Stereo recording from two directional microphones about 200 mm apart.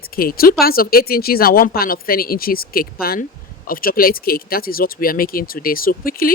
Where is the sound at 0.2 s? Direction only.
45° left (ahead or behind).